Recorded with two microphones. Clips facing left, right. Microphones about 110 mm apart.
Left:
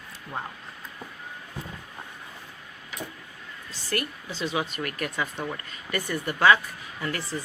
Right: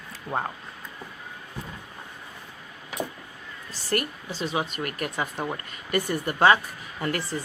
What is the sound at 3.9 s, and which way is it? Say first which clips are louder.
Speech: right 3 dB; 40° right (ahead or behind).